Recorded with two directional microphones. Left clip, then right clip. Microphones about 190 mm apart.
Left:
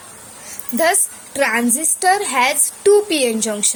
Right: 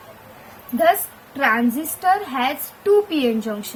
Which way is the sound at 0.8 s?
35° left (ahead or behind).